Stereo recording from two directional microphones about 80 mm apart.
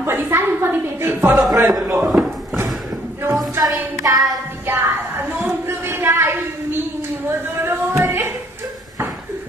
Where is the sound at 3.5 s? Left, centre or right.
Right.